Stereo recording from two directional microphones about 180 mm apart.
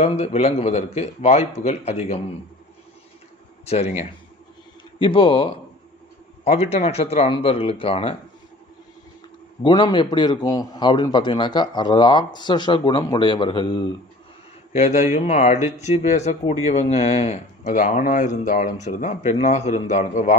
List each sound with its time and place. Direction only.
0.0 s speech: 35° left (ahead or behind)
3.6 s a man's voice: 35° left (ahead or behind)
9.6 s a man's voice: 25° left (ahead or behind)
14.7 s a man's voice: 40° left (ahead or behind)